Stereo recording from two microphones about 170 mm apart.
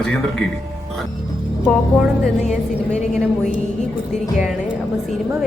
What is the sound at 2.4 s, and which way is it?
Speech, 45° left (ahead or behind).